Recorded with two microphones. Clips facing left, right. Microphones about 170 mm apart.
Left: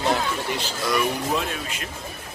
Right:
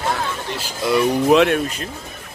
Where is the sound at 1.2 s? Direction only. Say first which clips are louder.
Right 12 dB; 70° right (ahead or behind).